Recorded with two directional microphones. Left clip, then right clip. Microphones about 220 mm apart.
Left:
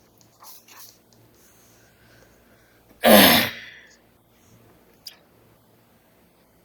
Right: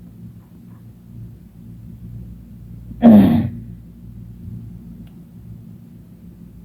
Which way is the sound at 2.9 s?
55° left (ahead or behind).